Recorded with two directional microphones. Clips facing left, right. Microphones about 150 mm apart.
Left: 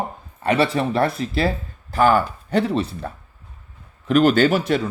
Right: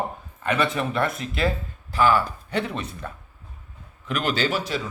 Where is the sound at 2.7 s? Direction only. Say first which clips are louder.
Left 9 dB; 35° left (ahead or behind).